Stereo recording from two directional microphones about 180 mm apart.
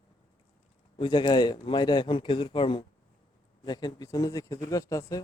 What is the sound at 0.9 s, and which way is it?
Speech, 25° left (ahead or behind).